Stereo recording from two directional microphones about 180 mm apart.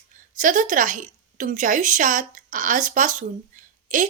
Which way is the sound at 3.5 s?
45° right (ahead or behind).